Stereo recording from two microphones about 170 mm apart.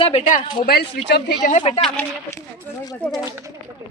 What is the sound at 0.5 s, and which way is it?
Speech, 65° left (ahead or behind).